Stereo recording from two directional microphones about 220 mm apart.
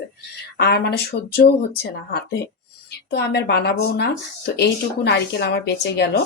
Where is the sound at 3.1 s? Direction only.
50° left (ahead or behind).